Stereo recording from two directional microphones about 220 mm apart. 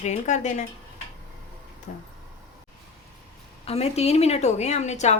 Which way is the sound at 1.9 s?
35° left (ahead or behind).